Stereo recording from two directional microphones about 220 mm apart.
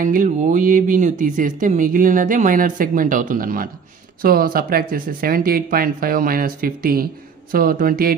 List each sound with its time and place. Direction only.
0.0 s speech: 40° right (ahead or behind)